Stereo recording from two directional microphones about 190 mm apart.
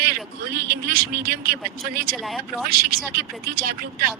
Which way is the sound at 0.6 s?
55° right (ahead or behind).